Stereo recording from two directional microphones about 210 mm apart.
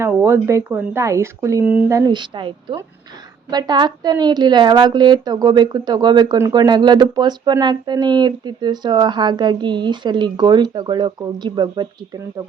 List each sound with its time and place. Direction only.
0.0 s a woman's voice: 10° right (ahead or behind)